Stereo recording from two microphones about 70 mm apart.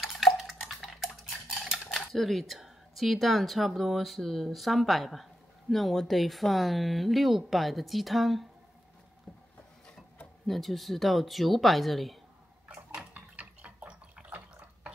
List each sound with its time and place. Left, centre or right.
0.0 s dishes: centre
1.9 s speech: centre
10.4 s speech: centre
12.6 s water: centre